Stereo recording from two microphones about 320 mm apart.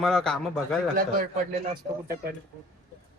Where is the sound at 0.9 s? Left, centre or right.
Right.